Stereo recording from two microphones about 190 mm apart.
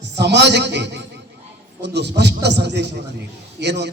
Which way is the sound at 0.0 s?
65° right (ahead or behind).